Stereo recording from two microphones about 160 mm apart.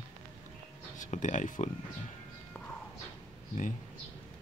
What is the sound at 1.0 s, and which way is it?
Speech, 50° left (ahead or behind).